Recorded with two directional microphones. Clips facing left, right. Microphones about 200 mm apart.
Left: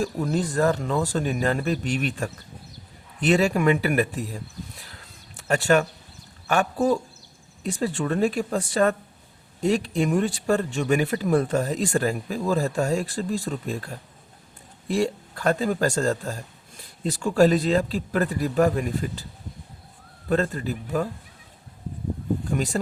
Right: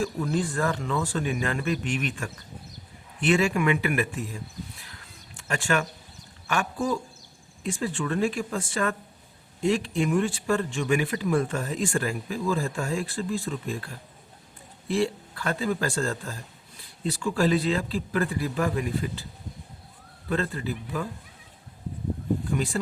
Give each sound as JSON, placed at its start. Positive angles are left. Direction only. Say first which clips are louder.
{"t": 0.0, "sound": "speech", "louder": "left 2 dB", "side_deg": 40}
{"t": 5.4, "sound": "a man's voice", "louder": "left 6 dB", "side_deg": 40}
{"t": 20.3, "sound": "a man's voice", "louder": "left 4 dB", "side_deg": 40}
{"t": 22.5, "sound": "speech", "louder": "left 5 dB", "side_deg": 40}